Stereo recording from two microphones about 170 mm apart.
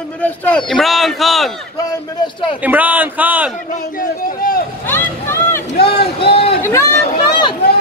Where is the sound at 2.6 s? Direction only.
10° right (ahead or behind).